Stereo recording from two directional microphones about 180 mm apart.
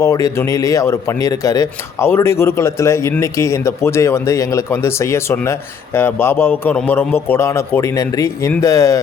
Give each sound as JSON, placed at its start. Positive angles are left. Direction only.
{"t": 0.0, "sound": "a man's voice", "side_deg": 15}